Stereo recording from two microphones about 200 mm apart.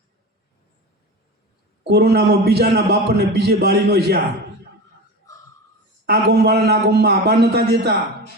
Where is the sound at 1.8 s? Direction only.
55° right (ahead or behind).